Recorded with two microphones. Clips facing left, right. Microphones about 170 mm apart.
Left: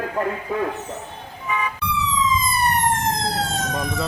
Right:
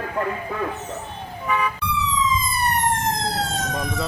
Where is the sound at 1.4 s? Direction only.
60° right (ahead or behind).